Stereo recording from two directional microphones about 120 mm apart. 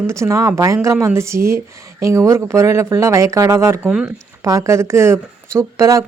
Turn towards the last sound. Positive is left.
turn(degrees=-25)  # may be behind; listen again after turning